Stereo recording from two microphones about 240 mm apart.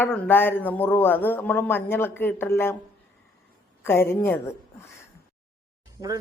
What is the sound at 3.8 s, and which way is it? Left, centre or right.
Speech, centre.